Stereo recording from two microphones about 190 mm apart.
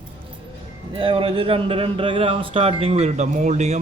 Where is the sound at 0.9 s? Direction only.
30° right (ahead or behind).